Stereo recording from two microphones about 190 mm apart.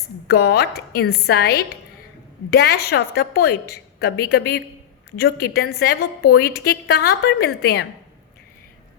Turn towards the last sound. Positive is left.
turn(degrees=60)  # may be behind; listen again after turning